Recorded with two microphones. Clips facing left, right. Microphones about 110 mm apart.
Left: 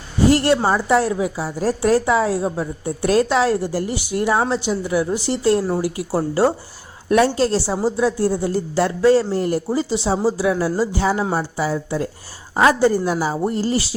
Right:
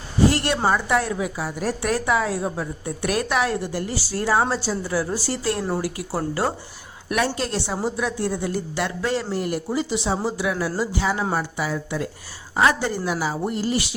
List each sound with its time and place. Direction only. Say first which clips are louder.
0.3 s a woman's voice: left 7 dB; 25° left (ahead or behind)
3.9 s a woman's voice: left 1 dB; 20° left (ahead or behind)